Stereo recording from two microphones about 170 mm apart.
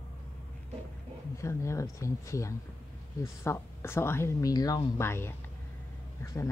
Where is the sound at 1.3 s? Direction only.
15° left (ahead or behind).